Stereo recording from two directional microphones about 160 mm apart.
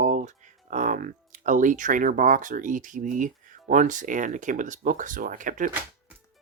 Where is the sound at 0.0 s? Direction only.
50° right (ahead or behind).